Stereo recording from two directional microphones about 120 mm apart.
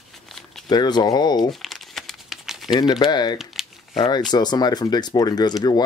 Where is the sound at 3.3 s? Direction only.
Centre (ahead or behind).